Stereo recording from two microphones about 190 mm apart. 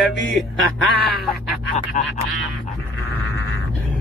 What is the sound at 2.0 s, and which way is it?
Speech, 40° left (ahead or behind).